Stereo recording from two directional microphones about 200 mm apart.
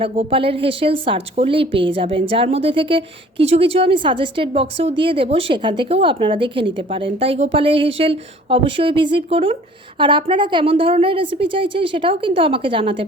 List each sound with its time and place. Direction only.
0.0 s speech: 30° right (ahead or behind)